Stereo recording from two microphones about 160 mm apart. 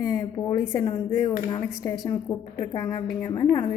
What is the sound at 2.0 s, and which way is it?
A woman's voice, 25° left (ahead or behind).